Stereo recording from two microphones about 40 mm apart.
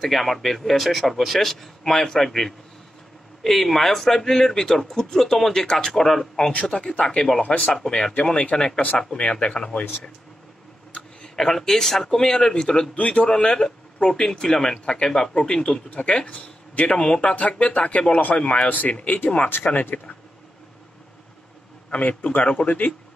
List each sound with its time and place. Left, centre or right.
0.0 s a man's voice: centre
6.5 s speech: left
7.4 s speech: left
7.7 s speech: centre
8.2 s speech: left
11.0 s speech: centre
12.9 s speech: left
13.3 s speech: centre
17.4 s speech: left
19.6 s speech: left
21.9 s speech: left